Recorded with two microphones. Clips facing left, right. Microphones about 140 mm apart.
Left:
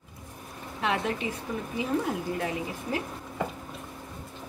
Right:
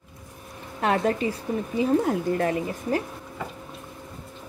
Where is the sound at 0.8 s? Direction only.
40° right (ahead or behind).